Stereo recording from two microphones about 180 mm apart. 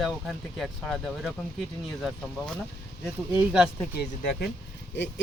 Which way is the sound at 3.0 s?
5° right (ahead or behind).